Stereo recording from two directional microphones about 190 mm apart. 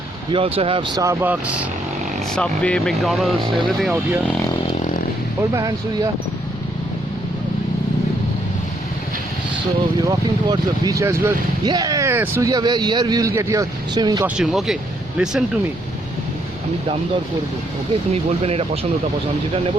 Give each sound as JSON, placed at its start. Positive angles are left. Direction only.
{"t": 0.3, "sound": "speech", "side_deg": -30}
{"t": 2.3, "sound": "speech", "side_deg": 5}
{"t": 5.4, "sound": "speech", "side_deg": -20}
{"t": 10.1, "sound": "speech", "side_deg": -20}
{"t": 14.3, "sound": "speech", "side_deg": 0}
{"t": 18.1, "sound": "speech", "side_deg": -30}